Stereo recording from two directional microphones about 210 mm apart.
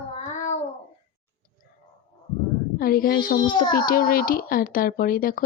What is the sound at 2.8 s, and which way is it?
A child's voice, 45° left (ahead or behind).